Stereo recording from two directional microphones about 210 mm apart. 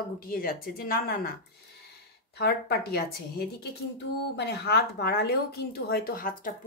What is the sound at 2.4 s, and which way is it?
Speech, 50° left (ahead or behind).